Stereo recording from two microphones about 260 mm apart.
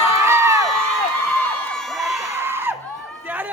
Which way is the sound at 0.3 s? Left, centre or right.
Centre.